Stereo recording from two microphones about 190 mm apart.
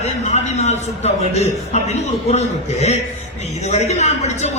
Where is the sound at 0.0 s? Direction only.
35° left (ahead or behind).